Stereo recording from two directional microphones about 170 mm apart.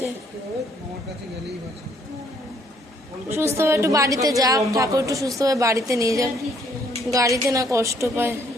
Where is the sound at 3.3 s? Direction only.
15° right (ahead or behind).